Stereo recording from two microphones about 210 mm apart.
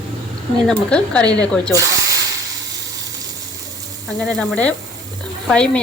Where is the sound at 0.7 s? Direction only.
5° left (ahead or behind).